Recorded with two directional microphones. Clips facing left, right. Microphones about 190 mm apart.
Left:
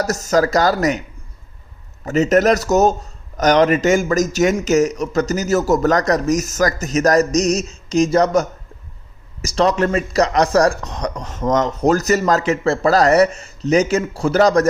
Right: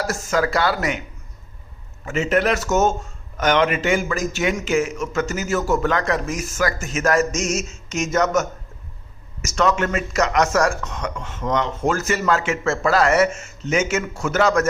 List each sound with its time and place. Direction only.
0.0 s speech: 40° left (ahead or behind)
2.0 s speech: 40° left (ahead or behind)